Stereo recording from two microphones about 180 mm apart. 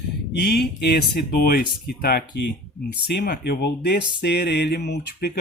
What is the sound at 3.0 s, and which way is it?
Speech, 70° left (ahead or behind).